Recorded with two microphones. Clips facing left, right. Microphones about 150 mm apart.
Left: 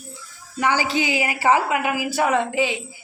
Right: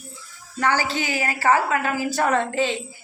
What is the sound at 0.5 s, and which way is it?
A woman's voice, 15° left (ahead or behind).